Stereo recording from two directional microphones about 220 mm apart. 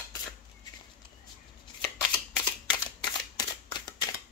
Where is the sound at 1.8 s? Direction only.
10° left (ahead or behind).